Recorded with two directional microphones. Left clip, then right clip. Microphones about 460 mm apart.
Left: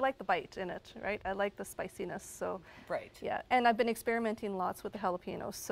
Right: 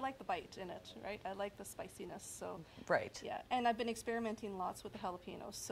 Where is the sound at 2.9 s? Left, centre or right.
Right.